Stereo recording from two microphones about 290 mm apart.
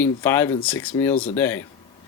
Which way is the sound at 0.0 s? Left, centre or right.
Centre.